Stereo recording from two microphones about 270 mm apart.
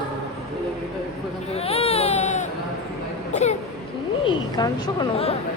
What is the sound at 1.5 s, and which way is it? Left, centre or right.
A woman's voice, left.